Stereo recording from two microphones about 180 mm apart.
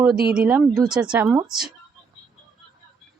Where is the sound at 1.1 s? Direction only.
15° right (ahead or behind).